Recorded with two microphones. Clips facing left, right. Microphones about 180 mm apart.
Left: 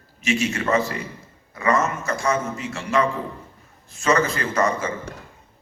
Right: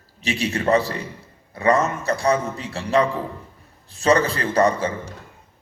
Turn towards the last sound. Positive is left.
turn(degrees=-35)  # may be behind; listen again after turning